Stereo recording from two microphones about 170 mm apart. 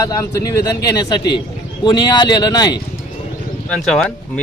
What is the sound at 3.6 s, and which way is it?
Speech, 5° left (ahead or behind).